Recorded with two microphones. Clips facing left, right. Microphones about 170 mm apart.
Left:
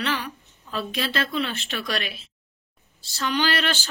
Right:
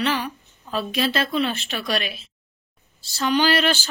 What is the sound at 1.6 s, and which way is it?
Speech, 10° right (ahead or behind).